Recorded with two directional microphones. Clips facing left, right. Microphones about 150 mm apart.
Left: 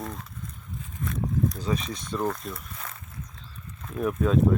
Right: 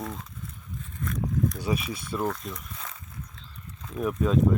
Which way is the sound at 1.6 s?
10° right (ahead or behind).